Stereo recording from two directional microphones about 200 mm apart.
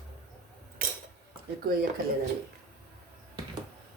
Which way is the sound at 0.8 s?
45° right (ahead or behind).